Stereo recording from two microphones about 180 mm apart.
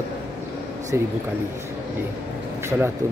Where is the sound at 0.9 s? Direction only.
15° right (ahead or behind).